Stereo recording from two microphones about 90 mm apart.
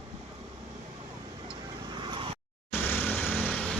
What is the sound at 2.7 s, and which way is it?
Vehicle, 25° left (ahead or behind).